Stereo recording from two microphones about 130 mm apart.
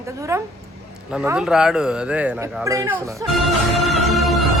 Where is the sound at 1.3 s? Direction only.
5° right (ahead or behind).